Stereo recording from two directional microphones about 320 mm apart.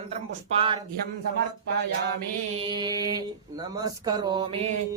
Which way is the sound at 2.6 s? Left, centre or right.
Centre.